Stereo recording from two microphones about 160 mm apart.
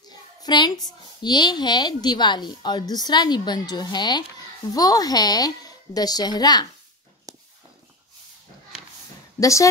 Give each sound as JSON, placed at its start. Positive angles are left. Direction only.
{"t": 0.4, "sound": "a child's voice", "side_deg": 25}
{"t": 9.4, "sound": "a woman's voice", "side_deg": 20}